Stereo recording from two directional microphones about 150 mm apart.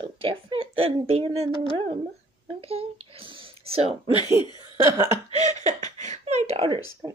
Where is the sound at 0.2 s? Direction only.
35° right (ahead or behind).